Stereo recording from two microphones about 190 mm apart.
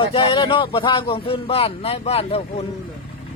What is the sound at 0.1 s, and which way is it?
A man's voice, 30° left (ahead or behind).